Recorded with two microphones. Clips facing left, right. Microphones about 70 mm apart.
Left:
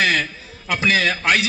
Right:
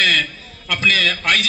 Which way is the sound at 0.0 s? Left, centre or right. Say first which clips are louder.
Even; centre.